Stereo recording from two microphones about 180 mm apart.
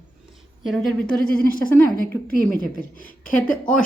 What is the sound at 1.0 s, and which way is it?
Speech, 50° left (ahead or behind).